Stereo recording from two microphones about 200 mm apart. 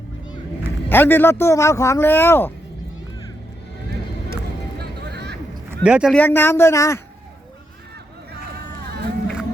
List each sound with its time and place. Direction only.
0.9 s speech: 10° left (ahead or behind)
4.8 s vehicle: 55° right (ahead or behind)
5.8 s speech: 5° right (ahead or behind)
6.1 s speech: 10° left (ahead or behind)
8.5 s run: 55° right (ahead or behind)